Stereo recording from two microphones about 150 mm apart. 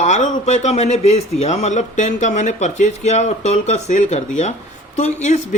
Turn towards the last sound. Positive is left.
turn(degrees=50)  # may be behind; listen again after turning